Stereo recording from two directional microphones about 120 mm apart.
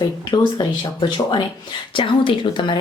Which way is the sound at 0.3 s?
40° left (ahead or behind).